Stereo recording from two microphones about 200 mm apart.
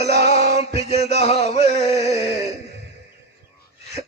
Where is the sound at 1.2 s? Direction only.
30° left (ahead or behind).